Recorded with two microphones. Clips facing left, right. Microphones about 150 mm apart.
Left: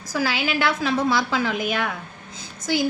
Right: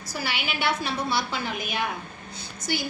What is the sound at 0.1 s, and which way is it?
A woman's voice, 90° left.